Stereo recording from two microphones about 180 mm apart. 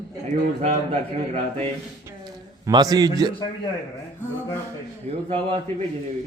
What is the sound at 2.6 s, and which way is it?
Speech, 20° right (ahead or behind).